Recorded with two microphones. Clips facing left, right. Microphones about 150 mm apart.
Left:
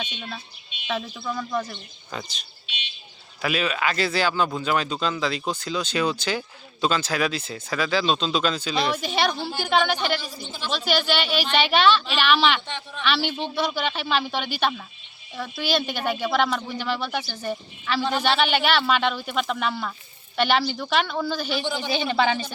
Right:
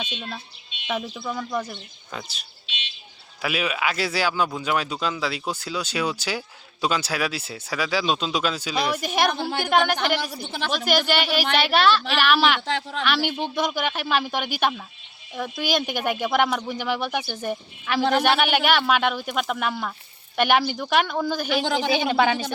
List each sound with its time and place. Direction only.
0.9 s speech: 15° right (ahead or behind)
2.6 s bird: 90° right
3.4 s speech: 10° right (ahead or behind)
9.4 s a woman's voice: 60° right (ahead or behind)
9.6 s speech: 10° right (ahead or behind)
10.0 s a woman's voice: 70° right (ahead or behind)
10.7 s speech: 10° right (ahead or behind)
12.6 s speech: 90° right
13.1 s speech: 10° right (ahead or behind)
21.4 s speech: 80° right
21.9 s speech: 10° right (ahead or behind)